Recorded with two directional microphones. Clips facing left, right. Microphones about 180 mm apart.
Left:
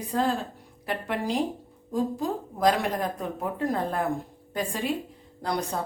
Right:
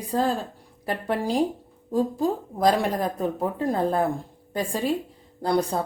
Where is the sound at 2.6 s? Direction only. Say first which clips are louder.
Right 2 dB; 35° right (ahead or behind).